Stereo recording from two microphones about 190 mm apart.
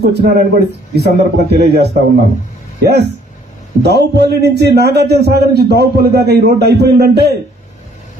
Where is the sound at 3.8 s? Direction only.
60° right (ahead or behind).